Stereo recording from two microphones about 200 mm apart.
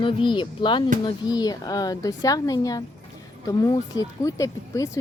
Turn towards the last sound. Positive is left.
turn(degrees=15)  # may be behind; listen again after turning